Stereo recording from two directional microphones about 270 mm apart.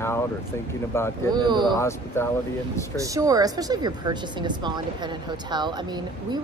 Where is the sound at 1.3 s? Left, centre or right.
Centre.